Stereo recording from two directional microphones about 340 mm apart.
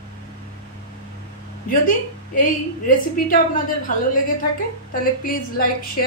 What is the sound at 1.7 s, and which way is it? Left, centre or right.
A woman's voice, left.